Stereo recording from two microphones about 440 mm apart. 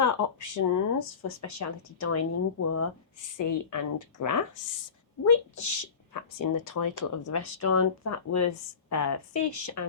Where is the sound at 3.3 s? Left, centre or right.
Left.